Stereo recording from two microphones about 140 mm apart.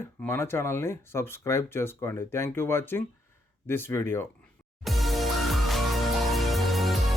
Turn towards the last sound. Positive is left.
turn(degrees=0)  # may be behind; listen again after turning